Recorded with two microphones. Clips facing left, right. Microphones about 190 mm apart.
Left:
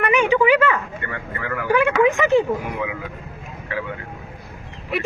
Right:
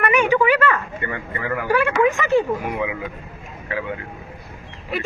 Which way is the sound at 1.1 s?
30° right (ahead or behind).